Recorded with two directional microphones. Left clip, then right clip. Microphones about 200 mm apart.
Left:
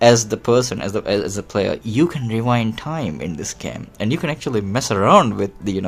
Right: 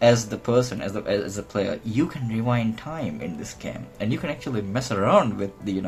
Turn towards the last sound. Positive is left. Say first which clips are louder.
# left 6 dB
turn(degrees=55)  # may be behind; listen again after turning